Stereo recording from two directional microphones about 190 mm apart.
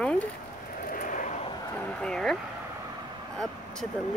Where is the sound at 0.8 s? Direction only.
50° left (ahead or behind).